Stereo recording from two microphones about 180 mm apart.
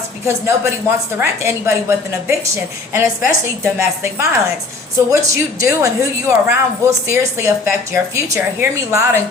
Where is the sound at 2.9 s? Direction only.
15° right (ahead or behind).